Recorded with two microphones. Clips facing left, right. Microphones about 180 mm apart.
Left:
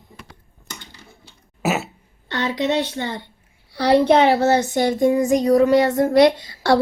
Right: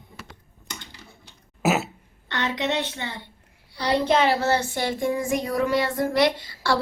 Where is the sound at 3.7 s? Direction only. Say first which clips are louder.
Left 7 dB; 65° left (ahead or behind).